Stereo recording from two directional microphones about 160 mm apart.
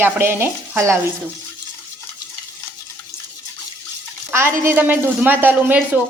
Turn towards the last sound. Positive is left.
turn(degrees=-10)  # may be behind; listen again after turning